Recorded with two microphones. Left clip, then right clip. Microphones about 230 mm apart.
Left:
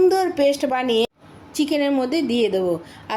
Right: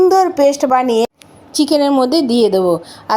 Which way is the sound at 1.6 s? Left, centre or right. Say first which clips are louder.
Right 7 dB; centre.